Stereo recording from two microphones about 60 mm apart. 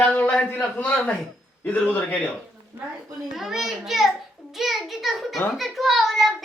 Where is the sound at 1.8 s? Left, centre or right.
Left.